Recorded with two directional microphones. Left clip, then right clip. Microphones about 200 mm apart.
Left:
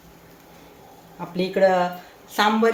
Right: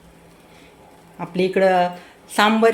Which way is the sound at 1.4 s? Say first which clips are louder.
Right 2 dB; 55° right (ahead or behind).